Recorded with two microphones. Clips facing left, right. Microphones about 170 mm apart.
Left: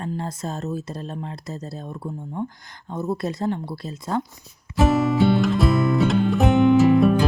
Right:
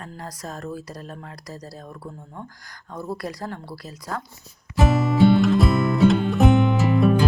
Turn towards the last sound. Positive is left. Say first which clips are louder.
# left 4 dB
turn(degrees=0)  # may be behind; listen again after turning